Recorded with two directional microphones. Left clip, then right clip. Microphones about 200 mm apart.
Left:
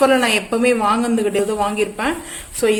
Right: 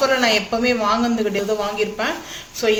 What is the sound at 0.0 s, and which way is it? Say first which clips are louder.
Speech: left 2 dB; 60° left (ahead or behind).